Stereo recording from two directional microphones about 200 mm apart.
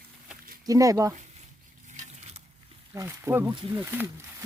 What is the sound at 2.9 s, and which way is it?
Speech, 15° right (ahead or behind).